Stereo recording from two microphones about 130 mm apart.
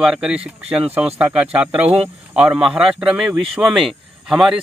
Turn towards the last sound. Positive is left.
turn(degrees=-5)  # may be behind; listen again after turning